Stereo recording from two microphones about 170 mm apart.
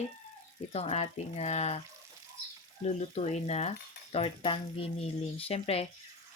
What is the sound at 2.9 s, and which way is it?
Speech, 40° left (ahead or behind).